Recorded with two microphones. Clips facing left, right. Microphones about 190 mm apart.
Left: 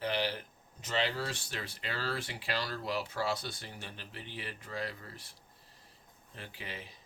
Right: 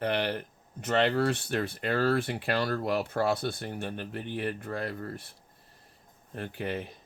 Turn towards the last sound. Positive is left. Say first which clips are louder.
# right 12 dB
turn(degrees=-55)  # may be behind; listen again after turning